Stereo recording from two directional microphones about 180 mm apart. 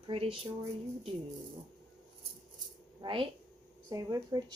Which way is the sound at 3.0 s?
30° right (ahead or behind).